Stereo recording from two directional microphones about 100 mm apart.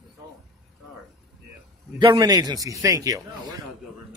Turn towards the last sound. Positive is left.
turn(degrees=-35)  # may be behind; listen again after turning